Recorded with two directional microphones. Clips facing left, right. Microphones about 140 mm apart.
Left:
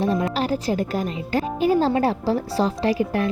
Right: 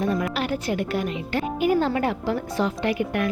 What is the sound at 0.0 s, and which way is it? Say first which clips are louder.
Speech: left 3 dB; 30° left (ahead or behind).